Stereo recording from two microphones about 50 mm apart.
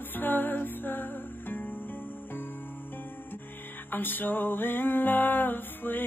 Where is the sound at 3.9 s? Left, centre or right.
Left.